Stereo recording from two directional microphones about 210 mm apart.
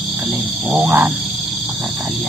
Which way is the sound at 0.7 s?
10° right (ahead or behind).